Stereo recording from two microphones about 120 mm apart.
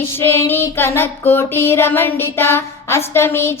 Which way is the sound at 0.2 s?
20° left (ahead or behind).